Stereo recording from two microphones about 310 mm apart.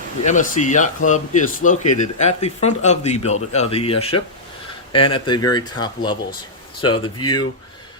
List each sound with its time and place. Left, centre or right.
0.3 s speech: left